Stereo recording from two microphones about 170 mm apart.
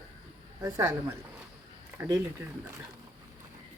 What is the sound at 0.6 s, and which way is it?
Speech, 15° right (ahead or behind).